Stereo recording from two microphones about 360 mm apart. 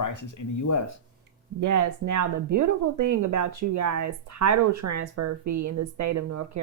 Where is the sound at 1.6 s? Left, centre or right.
Right.